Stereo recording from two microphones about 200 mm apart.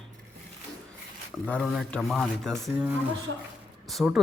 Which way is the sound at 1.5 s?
Centre (ahead or behind).